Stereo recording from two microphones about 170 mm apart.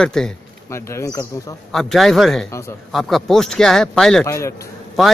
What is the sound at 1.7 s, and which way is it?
Speech, centre (ahead or behind).